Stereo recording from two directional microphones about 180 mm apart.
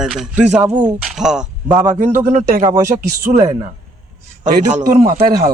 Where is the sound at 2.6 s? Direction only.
15° right (ahead or behind).